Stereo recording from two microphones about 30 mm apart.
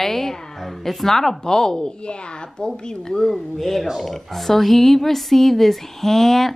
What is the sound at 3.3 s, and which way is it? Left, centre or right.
Speech, centre.